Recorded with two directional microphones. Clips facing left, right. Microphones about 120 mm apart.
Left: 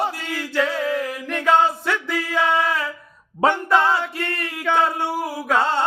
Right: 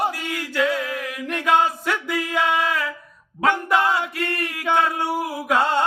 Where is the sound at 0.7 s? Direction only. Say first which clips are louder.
Left 2 dB; 30° left (ahead or behind).